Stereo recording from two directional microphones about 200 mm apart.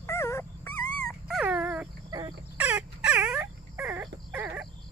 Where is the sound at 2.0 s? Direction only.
20° right (ahead or behind).